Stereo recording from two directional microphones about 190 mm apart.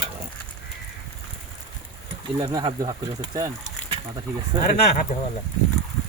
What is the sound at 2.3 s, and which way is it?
Speech, 25° right (ahead or behind).